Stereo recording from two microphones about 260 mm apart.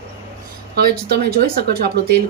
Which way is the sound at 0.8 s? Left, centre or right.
Right.